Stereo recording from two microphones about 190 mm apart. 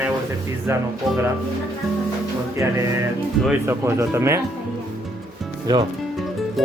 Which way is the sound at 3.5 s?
15° right (ahead or behind).